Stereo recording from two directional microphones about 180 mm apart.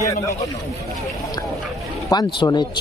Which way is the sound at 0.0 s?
15° left (ahead or behind).